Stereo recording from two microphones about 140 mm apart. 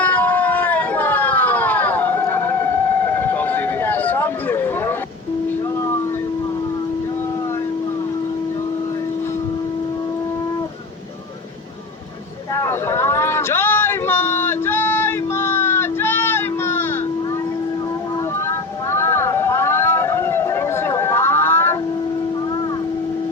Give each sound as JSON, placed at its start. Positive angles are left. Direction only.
{"t": 0.0, "sound": "a sound", "side_deg": 10}
{"t": 12.5, "sound": "vehicle", "side_deg": 20}
{"t": 18.9, "sound": "vehicle", "side_deg": 20}